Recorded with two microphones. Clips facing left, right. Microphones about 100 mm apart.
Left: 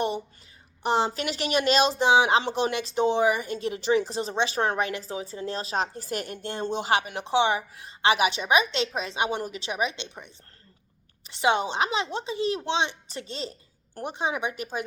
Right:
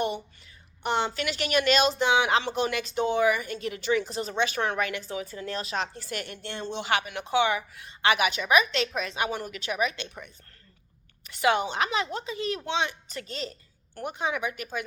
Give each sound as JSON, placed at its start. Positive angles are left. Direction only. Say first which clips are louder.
{"t": 0.8, "sound": "speech", "louder": "left 3 dB", "side_deg": 35}
{"t": 11.3, "sound": "a woman's voice", "louder": "left 1 dB", "side_deg": 25}